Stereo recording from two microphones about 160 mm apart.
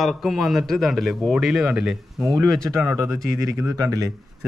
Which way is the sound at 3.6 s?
20° right (ahead or behind).